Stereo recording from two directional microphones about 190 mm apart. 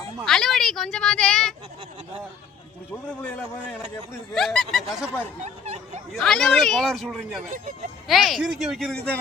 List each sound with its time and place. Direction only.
0.3 s speech: centre (ahead or behind)
3.2 s a man's voice: 10° left (ahead or behind)
4.4 s speech: centre (ahead or behind)
5.4 s speech: 35° right (ahead or behind)
6.1 s speech: 5° left (ahead or behind)
7.5 s speech: 45° right (ahead or behind)
8.0 s speech: centre (ahead or behind)